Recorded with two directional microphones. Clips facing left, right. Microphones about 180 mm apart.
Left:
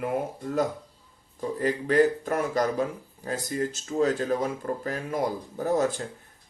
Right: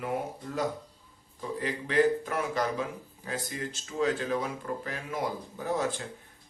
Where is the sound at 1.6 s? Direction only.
45° left (ahead or behind).